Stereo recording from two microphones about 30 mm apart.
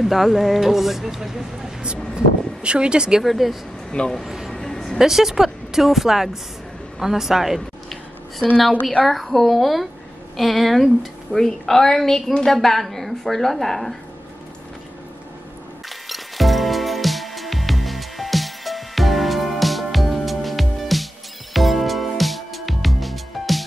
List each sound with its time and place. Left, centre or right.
0.0 s speech: centre
1.8 s speech: right
3.3 s a woman's voice: centre
3.9 s speech: left
4.5 s a sound: centre
4.9 s speech: centre
9.0 s a woman's voice: centre
11.3 s a woman's voice: centre
16.1 s music: centre